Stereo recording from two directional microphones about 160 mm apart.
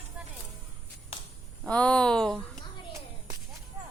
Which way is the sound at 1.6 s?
5° left (ahead or behind).